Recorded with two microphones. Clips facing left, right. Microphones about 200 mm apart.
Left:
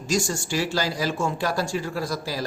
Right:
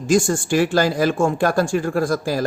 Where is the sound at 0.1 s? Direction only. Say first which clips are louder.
Right 8 dB; 55° right (ahead or behind).